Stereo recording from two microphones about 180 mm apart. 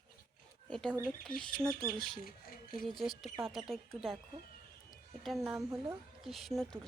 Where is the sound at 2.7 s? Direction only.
Centre (ahead or behind).